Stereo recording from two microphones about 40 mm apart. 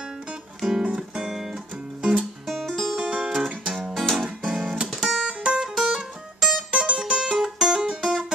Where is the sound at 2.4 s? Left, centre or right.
Centre.